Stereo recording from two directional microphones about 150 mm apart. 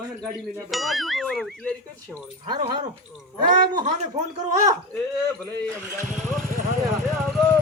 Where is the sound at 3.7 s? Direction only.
50° right (ahead or behind).